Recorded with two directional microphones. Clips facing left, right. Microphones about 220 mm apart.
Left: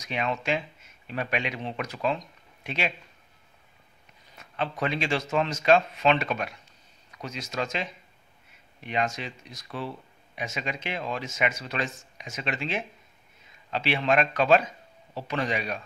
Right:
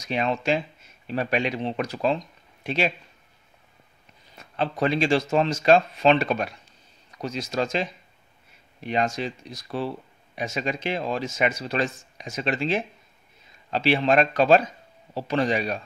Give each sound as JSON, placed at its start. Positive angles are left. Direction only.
{"t": 0.0, "sound": "speech", "side_deg": -35}
{"t": 4.4, "sound": "speech", "side_deg": -35}